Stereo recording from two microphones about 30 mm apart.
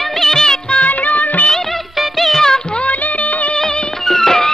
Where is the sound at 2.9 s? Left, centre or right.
Left.